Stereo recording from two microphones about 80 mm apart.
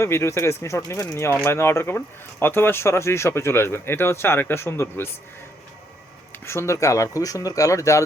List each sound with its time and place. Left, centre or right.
0.0 s speech: left
6.3 s speech: left